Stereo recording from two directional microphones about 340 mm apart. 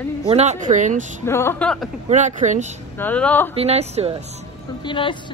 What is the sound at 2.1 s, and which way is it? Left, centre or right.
Speech, right.